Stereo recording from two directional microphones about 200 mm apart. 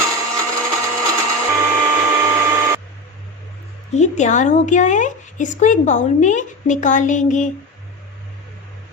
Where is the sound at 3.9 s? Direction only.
35° left (ahead or behind).